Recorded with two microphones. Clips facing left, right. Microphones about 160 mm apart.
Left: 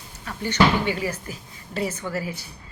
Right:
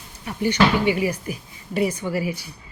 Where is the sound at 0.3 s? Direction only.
15° right (ahead or behind).